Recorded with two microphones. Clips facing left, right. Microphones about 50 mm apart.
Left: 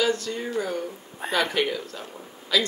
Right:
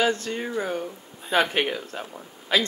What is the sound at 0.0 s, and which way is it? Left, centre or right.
Speech, right.